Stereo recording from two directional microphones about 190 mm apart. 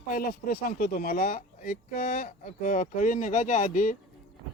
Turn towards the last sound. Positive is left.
turn(degrees=45)  # may be behind; listen again after turning